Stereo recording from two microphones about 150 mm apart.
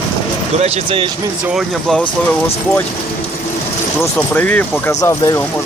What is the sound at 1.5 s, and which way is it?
Speech, centre (ahead or behind).